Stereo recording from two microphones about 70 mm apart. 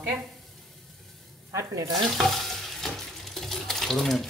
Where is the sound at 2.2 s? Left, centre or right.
Centre.